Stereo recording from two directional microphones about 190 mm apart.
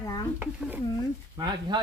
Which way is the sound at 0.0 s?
20° left (ahead or behind).